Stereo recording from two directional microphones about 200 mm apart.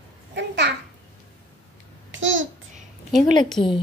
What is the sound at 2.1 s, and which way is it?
Babbling, 70° right (ahead or behind).